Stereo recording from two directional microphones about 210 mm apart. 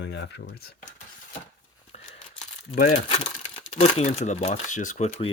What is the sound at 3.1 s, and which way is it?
Speech, 25° left (ahead or behind).